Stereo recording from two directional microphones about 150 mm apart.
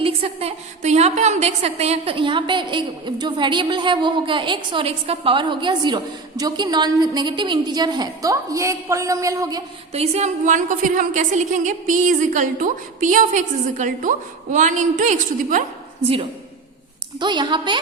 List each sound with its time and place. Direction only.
0.0 s a woman's voice: 40° right (ahead or behind); by 9.6 s 25° right (ahead or behind)
9.9 s a woman's voice: 45° right (ahead or behind)
17.2 s a woman's voice: 30° right (ahead or behind)